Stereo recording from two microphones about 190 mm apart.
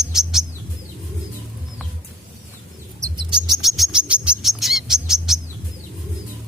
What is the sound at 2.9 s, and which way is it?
Bird, 20° right (ahead or behind).